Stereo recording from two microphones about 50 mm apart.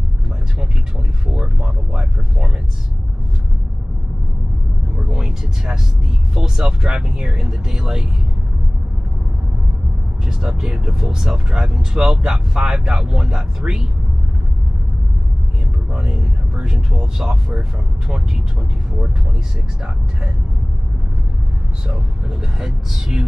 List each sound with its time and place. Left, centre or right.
1.3 s a sound: centre
5.0 s a sound: centre
6.3 s speech: centre
10.2 s speech: centre
15.9 s speech: centre
21.9 s speech: centre